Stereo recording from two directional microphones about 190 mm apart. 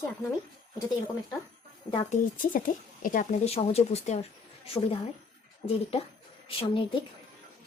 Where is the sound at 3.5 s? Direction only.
35° left (ahead or behind).